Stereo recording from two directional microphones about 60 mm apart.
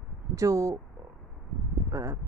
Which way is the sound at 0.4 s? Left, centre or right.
Right.